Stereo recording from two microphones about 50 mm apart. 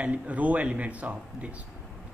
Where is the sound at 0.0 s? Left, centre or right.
Right.